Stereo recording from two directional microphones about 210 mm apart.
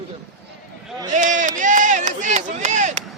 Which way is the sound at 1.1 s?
40° right (ahead or behind).